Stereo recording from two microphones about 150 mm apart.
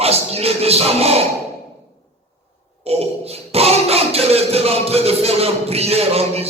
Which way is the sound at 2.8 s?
45° right (ahead or behind).